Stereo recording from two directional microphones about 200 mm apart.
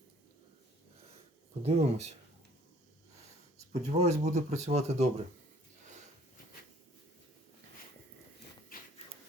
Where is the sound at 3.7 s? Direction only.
35° right (ahead or behind).